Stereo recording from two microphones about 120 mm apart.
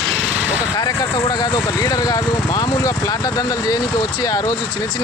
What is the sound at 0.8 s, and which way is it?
Speech, 30° left (ahead or behind).